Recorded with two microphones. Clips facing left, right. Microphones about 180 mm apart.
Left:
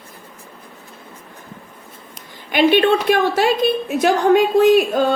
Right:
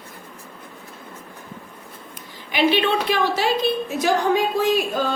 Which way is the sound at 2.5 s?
50° left (ahead or behind).